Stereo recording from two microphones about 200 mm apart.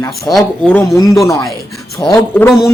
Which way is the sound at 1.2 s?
15° left (ahead or behind).